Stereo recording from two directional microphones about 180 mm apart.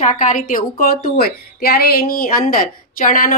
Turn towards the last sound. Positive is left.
turn(degrees=50)  # may be behind; listen again after turning